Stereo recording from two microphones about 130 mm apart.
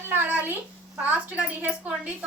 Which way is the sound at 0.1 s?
15° right (ahead or behind).